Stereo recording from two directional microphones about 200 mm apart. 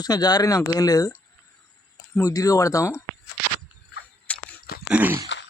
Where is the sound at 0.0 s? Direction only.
20° left (ahead or behind).